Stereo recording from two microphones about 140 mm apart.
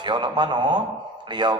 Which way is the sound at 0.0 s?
35° right (ahead or behind).